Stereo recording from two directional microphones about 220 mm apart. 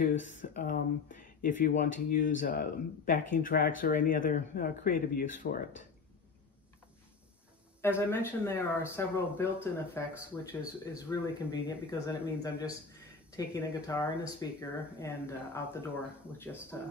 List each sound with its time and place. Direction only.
0.3 s speech: 35° left (ahead or behind)
7.8 s speech: 10° left (ahead or behind)
16.7 s speech: 10° left (ahead or behind)